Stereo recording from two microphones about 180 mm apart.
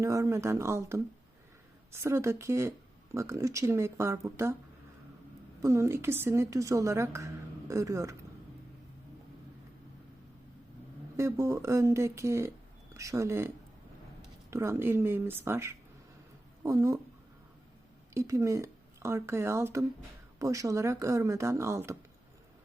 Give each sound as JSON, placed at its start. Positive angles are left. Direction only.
{"t": 0.0, "sound": "a woman's voice", "side_deg": -15}
{"t": 5.6, "sound": "a woman's voice", "side_deg": -15}
{"t": 11.2, "sound": "a woman's voice", "side_deg": -15}
{"t": 14.5, "sound": "a woman's voice", "side_deg": -15}
{"t": 18.1, "sound": "a woman's voice", "side_deg": -15}